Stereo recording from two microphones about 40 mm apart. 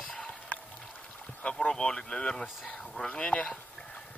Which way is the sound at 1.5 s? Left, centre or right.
Centre.